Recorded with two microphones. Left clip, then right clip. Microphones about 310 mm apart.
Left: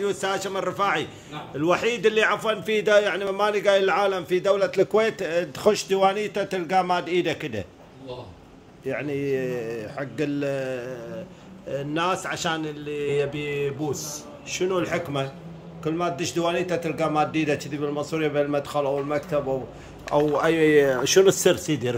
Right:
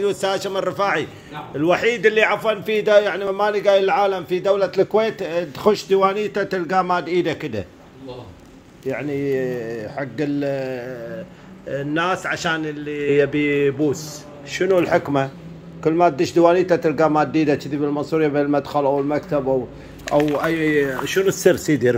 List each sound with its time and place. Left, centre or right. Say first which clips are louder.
0.0 s a man's voice: right 5 dB; centre
8.8 s a man's voice: right 4 dB; centre
13.4 s speech: right 9 dB; right
14.8 s a man's voice: right 8 dB; centre
21.5 s a man's voice: right 8 dB; centre